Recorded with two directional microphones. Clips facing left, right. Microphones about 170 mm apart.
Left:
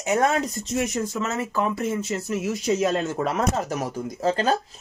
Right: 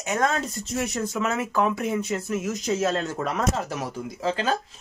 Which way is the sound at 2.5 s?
10° left (ahead or behind).